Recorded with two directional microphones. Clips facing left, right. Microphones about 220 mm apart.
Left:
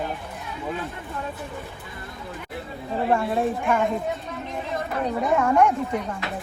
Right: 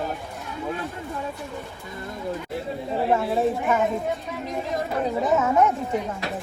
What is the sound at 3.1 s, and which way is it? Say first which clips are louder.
Speech: even; centre (ahead or behind).